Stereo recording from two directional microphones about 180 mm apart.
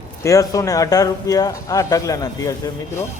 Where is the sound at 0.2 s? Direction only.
15° left (ahead or behind).